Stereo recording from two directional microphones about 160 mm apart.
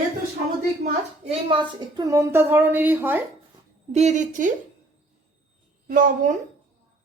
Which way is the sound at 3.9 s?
45° right (ahead or behind).